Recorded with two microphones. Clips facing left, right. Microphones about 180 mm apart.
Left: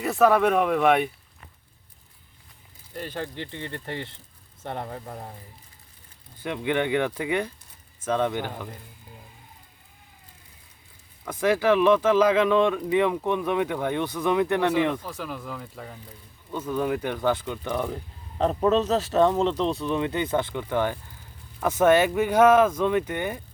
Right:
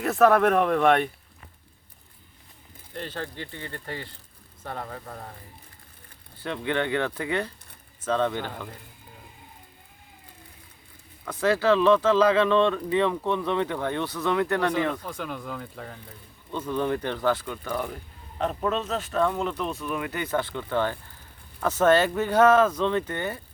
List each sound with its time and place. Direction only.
0.0 s speech: centre (ahead or behind)
2.9 s speech: 10° left (ahead or behind)
6.4 s speech: 15° left (ahead or behind)
11.3 s speech: 10° left (ahead or behind)
18.3 s speech: 35° left (ahead or behind); by 23.4 s 15° left (ahead or behind)